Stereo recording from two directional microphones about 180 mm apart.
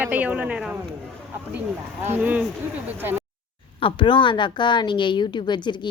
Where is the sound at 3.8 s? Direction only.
30° left (ahead or behind).